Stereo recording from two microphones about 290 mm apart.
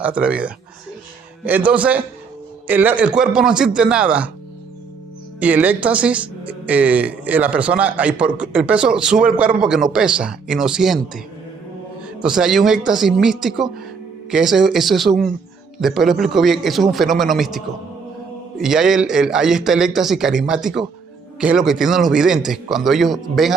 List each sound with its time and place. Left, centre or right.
0.0 s a woman's voice: centre
5.4 s a woman's voice: centre
12.2 s a woman's voice: centre